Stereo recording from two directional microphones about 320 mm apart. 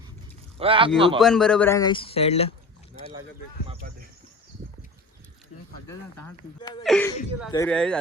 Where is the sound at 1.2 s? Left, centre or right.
Centre.